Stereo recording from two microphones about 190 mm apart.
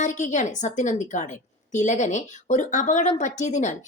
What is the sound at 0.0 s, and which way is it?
A woman's voice, 40° left (ahead or behind).